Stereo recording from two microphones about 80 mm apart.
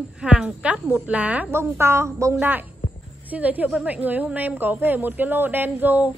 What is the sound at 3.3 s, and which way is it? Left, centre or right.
A woman's voice, centre.